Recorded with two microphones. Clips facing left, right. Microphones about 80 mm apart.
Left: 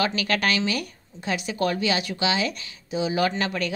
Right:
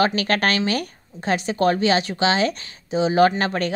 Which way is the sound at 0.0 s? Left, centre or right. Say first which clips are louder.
Right 4 dB; right.